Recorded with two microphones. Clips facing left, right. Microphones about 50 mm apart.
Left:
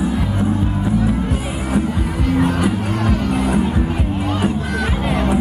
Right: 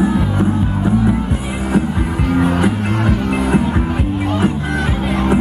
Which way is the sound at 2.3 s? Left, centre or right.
Right.